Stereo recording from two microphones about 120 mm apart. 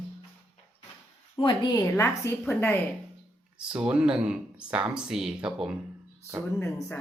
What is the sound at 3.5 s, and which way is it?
Speech, 10° right (ahead or behind).